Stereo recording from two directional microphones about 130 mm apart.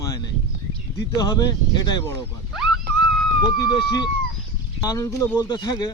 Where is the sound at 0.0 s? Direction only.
25° left (ahead or behind).